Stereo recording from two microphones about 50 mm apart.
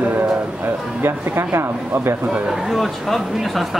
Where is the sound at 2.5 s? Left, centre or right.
Centre.